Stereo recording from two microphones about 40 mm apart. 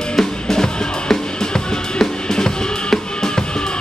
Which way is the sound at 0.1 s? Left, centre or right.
Centre.